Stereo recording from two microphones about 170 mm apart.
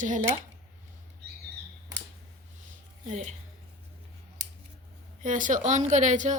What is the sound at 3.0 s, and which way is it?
Speech, 45° right (ahead or behind).